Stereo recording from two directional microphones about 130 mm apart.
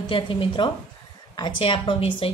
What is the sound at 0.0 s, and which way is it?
A woman's voice, 40° left (ahead or behind).